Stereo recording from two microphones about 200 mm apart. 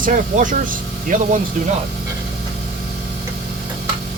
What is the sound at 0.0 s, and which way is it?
Speech, 40° right (ahead or behind).